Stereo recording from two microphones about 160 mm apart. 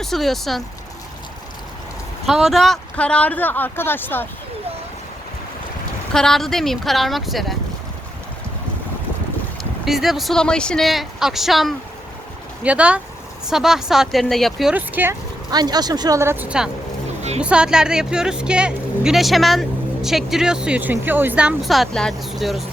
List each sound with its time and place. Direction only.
0.0 s speech: centre (ahead or behind)
2.2 s speech: centre (ahead or behind)
6.1 s speech: centre (ahead or behind)
9.8 s speech: centre (ahead or behind)
15.4 s speech: 25° right (ahead or behind); by 22.6 s centre (ahead or behind)